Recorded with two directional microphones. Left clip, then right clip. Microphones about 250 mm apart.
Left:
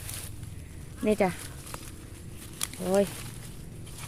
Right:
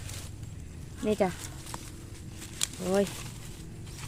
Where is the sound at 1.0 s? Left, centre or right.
Centre.